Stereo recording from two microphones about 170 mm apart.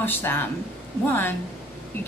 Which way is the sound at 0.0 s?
10° left (ahead or behind).